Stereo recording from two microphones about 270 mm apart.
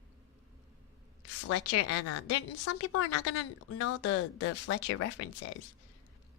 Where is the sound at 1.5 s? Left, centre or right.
Left.